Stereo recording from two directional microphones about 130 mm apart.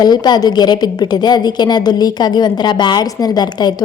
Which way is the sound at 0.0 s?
30° left (ahead or behind).